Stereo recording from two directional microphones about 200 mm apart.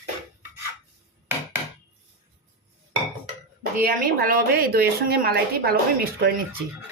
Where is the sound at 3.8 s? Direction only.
45° right (ahead or behind).